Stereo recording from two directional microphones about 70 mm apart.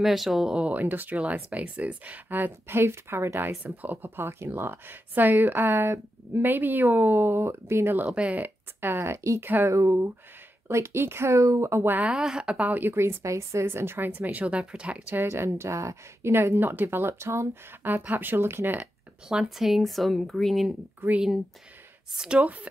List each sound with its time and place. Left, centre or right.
0.0 s speech: centre
0.6 s speech: right
8.1 s a woman's voice: centre
8.8 s speech: right
12.0 s a woman's voice: centre
12.6 s speech: right
15.1 s speech: right
17.8 s speech: right
19.2 s speech: centre
21.0 s speech: right
22.1 s a woman's voice: centre
22.4 s speech: right